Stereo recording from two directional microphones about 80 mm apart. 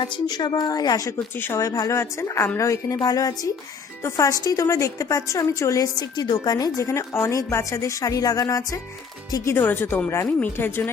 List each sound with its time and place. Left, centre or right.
0.0 s a woman's voice: left
2.0 s a woman's voice: left
3.0 s a woman's voice: left
9.6 s speech: left